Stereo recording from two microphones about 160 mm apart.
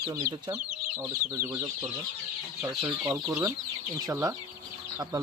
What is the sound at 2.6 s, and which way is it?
Speech, 15° right (ahead or behind).